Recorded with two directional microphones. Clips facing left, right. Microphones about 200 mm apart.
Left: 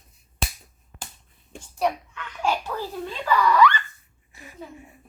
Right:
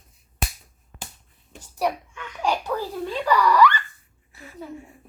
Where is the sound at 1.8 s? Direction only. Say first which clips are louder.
Even; 15° right (ahead or behind).